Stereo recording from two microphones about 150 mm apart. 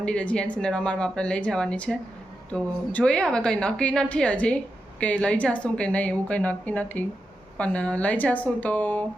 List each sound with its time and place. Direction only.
0.0 s a woman's voice: 10° left (ahead or behind)